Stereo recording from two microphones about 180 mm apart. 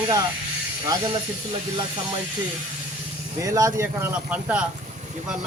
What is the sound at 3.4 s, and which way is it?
Speech, 15° right (ahead or behind).